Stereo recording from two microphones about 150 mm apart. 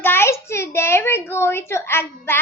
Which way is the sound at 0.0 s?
15° left (ahead or behind).